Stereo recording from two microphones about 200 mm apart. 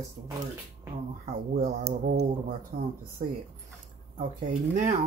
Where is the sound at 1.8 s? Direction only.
50° right (ahead or behind).